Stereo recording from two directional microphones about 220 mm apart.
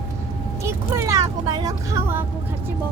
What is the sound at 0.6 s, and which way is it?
Speech, 10° right (ahead or behind).